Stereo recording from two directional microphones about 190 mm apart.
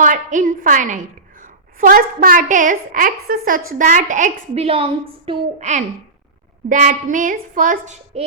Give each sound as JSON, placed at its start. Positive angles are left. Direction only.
{"t": 0.0, "sound": "a woman's voice", "side_deg": -40}